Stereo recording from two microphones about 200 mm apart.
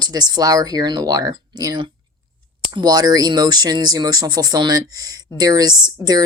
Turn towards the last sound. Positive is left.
turn(degrees=-20)  # may be behind; listen again after turning